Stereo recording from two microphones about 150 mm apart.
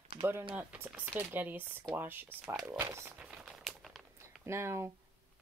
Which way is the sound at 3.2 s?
5° right (ahead or behind).